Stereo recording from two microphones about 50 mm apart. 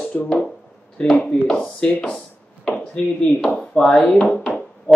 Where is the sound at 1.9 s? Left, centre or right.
Centre.